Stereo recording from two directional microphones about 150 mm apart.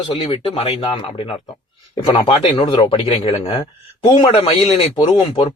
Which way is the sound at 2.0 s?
35° left (ahead or behind).